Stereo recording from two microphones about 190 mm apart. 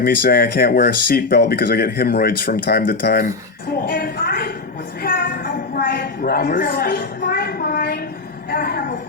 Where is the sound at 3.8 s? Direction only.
50° left (ahead or behind).